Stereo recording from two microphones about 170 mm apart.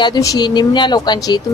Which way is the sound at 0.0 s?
20° left (ahead or behind).